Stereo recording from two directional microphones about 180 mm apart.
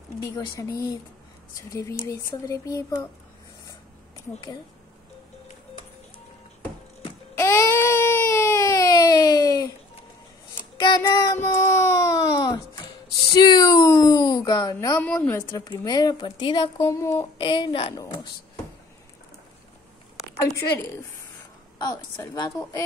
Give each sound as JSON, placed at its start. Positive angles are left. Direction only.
{"t": 0.2, "sound": "speech", "side_deg": 15}
{"t": 7.3, "sound": "baby cry", "side_deg": 15}
{"t": 10.6, "sound": "child singing", "side_deg": 45}
{"t": 10.9, "sound": "child singing", "side_deg": 20}
{"t": 13.4, "sound": "a sound", "side_deg": 25}
{"t": 15.0, "sound": "a woman's voice", "side_deg": 10}
{"t": 16.8, "sound": "a woman's voice", "side_deg": 15}
{"t": 20.3, "sound": "a woman's voice", "side_deg": 15}